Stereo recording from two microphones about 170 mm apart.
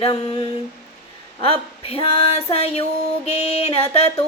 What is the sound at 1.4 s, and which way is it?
Female singing, 35° left (ahead or behind).